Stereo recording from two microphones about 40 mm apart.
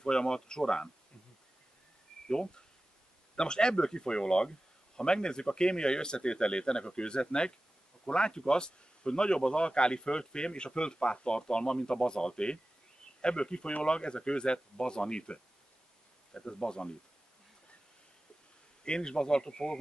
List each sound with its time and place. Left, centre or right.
0.0 s speech: centre
2.2 s speech: left
18.9 s speech: left